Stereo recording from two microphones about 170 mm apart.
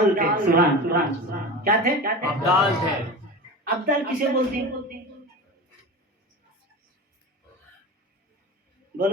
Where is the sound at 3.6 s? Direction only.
55° right (ahead or behind).